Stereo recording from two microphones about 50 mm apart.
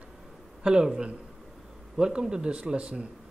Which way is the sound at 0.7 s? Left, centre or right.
Centre.